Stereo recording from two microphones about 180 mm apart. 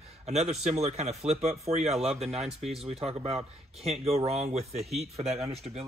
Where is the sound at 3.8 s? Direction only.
35° right (ahead or behind).